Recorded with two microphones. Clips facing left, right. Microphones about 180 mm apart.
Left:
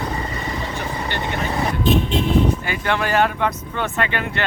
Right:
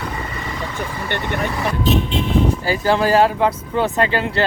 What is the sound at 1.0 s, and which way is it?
Speech, 55° right (ahead or behind).